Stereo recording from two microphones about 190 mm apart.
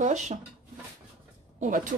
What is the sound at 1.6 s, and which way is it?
Speech, 45° right (ahead or behind).